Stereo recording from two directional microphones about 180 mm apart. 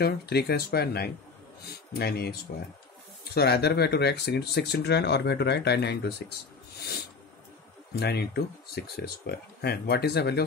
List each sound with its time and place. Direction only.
0.0 s speech: 65° left (ahead or behind)
3.3 s speech: 65° left (ahead or behind)
6.8 s a sound: 60° left (ahead or behind)
7.9 s speech: 65° left (ahead or behind)